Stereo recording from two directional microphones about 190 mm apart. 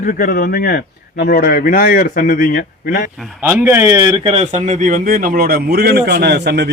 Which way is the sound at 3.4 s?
10° right (ahead or behind).